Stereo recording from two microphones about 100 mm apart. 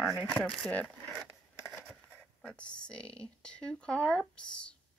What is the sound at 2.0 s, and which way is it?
Speech, 10° left (ahead or behind).